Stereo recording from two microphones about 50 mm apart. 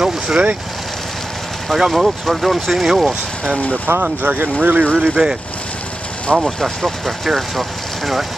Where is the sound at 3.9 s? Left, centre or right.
Right.